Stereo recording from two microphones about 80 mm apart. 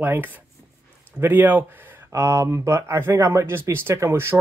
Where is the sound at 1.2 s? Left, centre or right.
Right.